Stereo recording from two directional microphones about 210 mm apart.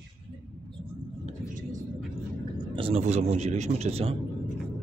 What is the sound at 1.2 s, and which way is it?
Vehicle, 40° right (ahead or behind).